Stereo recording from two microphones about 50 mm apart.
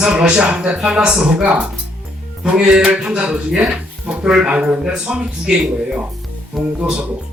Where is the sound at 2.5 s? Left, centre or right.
Centre.